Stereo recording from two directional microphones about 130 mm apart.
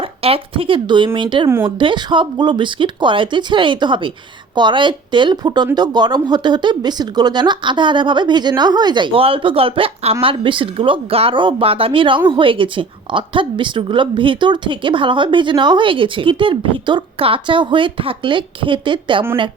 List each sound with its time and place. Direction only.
0.0 s a woman's voice: 45° right (ahead or behind)